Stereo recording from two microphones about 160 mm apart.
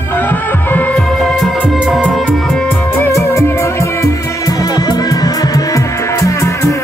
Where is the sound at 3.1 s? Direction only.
15° left (ahead or behind).